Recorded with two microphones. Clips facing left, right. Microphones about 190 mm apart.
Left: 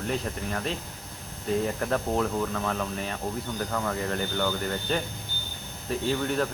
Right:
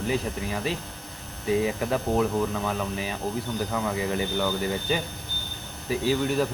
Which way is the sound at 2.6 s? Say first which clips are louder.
Right 1 dB; 5° right (ahead or behind).